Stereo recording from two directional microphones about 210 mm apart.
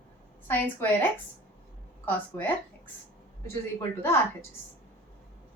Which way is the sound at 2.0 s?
10° left (ahead or behind).